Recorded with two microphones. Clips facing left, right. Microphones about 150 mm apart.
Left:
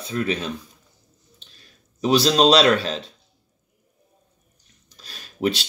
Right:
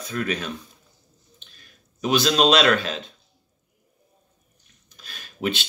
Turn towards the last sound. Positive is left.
turn(degrees=35)  # may be behind; listen again after turning